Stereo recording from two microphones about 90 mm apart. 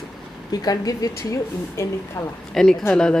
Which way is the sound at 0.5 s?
45° left (ahead or behind).